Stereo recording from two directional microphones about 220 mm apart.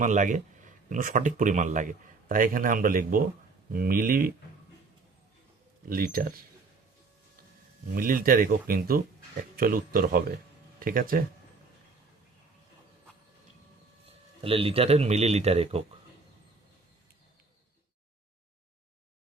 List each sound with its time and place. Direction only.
0.0 s speech: 35° right (ahead or behind)
5.9 s speech: 40° right (ahead or behind)
7.9 s speech: 40° right (ahead or behind)
14.4 s speech: 25° right (ahead or behind)